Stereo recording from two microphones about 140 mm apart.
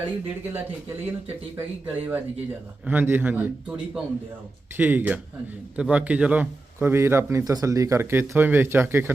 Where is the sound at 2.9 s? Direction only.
15° right (ahead or behind).